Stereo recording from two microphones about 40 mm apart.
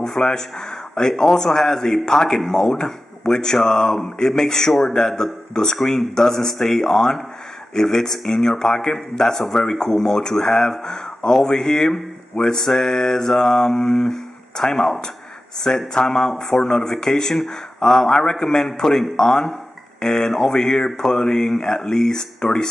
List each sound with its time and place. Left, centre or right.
0.0 s speech: centre